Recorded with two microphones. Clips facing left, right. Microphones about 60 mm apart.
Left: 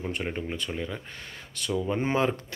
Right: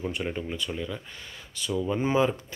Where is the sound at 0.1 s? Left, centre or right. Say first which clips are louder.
Even; left.